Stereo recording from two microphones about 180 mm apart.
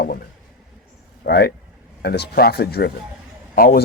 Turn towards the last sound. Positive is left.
turn(degrees=55)  # may be behind; listen again after turning